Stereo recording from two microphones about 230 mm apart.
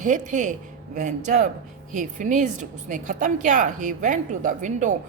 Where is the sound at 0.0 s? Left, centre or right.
Right.